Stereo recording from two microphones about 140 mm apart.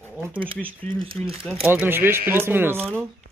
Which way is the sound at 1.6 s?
15° right (ahead or behind).